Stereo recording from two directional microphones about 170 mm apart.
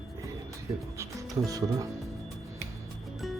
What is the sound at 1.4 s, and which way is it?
Music, 20° right (ahead or behind).